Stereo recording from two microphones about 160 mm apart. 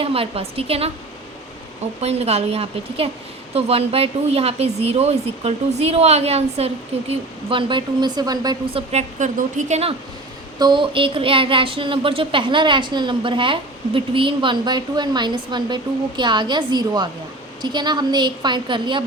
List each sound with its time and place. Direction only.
0.0 s speech: 35° right (ahead or behind)
2.0 s a woman's voice: 40° right (ahead or behind); by 8.5 s 25° right (ahead or behind)
8.7 s speech: 40° right (ahead or behind)
10.6 s a woman's voice: 30° right (ahead or behind)